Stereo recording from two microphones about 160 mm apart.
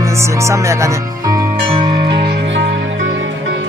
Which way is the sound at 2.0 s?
90° right.